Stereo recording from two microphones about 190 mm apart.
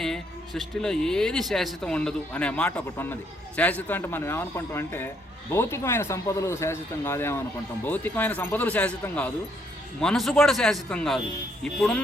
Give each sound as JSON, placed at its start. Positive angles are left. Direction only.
{"t": 0.0, "sound": "a man's voice", "side_deg": 0}